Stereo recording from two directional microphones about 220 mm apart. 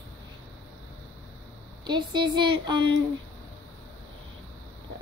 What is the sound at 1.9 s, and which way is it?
Speech, 20° right (ahead or behind).